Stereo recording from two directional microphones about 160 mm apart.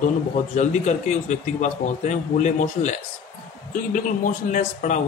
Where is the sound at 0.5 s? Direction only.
45° left (ahead or behind).